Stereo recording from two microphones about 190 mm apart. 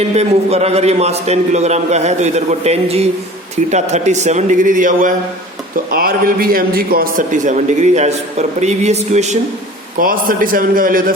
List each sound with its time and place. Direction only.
0.1 s a man's voice: 35° right (ahead or behind)
10.0 s a man's voice: 50° right (ahead or behind)